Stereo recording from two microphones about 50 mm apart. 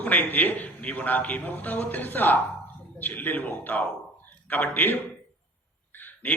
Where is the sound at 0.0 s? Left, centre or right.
Left.